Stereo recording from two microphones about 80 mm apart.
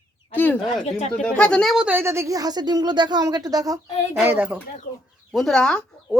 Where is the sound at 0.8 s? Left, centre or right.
Centre.